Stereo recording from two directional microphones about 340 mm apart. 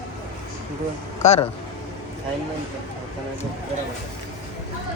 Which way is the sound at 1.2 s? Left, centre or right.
Centre.